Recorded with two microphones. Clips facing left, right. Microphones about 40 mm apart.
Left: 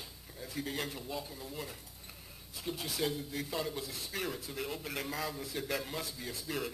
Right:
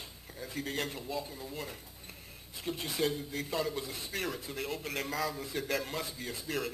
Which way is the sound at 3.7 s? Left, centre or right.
Right.